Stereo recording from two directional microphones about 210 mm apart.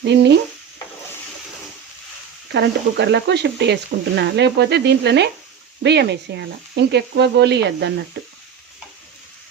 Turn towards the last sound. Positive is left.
turn(degrees=-55)  # may be behind; listen again after turning